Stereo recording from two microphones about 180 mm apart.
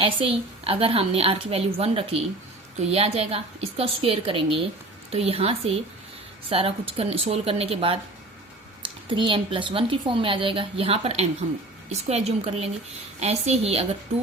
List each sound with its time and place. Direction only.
0.0 s a woman's voice: 30° right (ahead or behind)